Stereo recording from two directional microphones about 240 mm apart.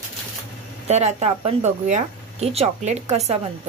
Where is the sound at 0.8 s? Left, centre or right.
Right.